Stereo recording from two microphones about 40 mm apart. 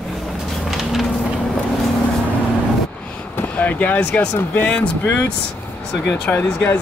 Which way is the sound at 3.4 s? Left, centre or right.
Left.